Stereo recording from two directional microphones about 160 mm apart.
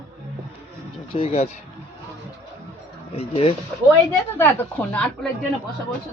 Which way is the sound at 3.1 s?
35° left (ahead or behind).